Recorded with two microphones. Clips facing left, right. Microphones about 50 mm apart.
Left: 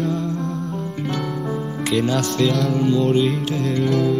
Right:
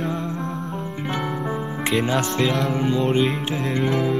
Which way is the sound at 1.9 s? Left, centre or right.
Right.